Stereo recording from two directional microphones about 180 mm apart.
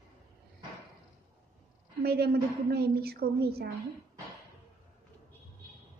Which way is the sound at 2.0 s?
60° right (ahead or behind).